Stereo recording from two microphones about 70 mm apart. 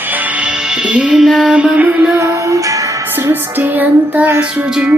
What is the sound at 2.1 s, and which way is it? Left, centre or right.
Music, right.